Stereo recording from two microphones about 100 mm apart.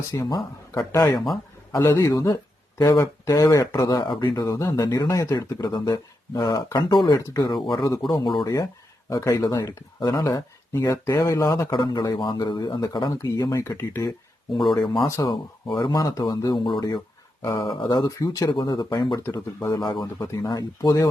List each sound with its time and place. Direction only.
0.1 s speech: 35° left (ahead or behind)
4.1 s speech: 55° left (ahead or behind)
4.4 s speech: 35° left (ahead or behind); by 7.8 s 50° left (ahead or behind)
7.8 s speech: 35° left (ahead or behind)
9.0 s speech: 35° left (ahead or behind)
11.7 s speech: 50° left (ahead or behind); by 14.1 s 25° left (ahead or behind)
14.5 s speech: centre (ahead or behind)
15.0 s speech: 30° left (ahead or behind)
16.6 s speech: 55° left (ahead or behind)
17.4 s speech: 40° left (ahead or behind)
19.2 s speech: 25° left (ahead or behind)